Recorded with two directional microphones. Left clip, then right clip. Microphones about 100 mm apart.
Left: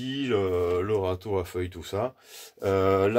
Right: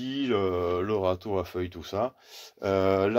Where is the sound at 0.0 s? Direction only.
40° right (ahead or behind).